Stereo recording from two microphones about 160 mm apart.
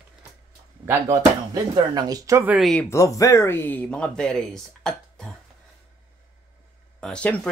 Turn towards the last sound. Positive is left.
turn(degrees=5)  # may be behind; listen again after turning